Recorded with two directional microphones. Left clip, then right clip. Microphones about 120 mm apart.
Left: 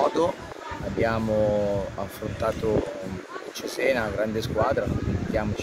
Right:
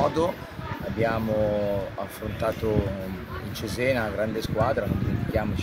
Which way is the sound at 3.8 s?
10° left (ahead or behind).